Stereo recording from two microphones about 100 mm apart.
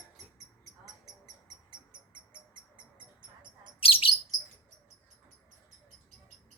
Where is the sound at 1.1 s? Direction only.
40° right (ahead or behind).